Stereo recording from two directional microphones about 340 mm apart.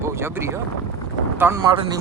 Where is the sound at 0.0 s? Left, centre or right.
Centre.